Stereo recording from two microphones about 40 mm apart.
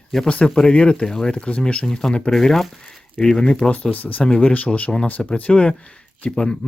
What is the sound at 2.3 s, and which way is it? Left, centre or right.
Speech, centre.